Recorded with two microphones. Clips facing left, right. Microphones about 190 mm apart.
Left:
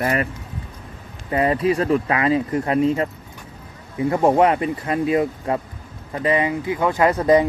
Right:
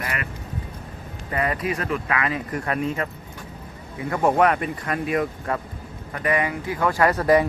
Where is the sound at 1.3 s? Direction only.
30° left (ahead or behind).